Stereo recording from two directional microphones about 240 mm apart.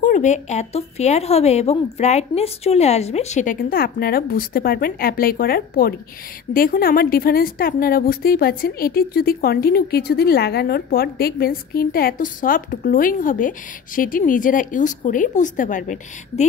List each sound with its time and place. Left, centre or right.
0.0 s a woman's voice: left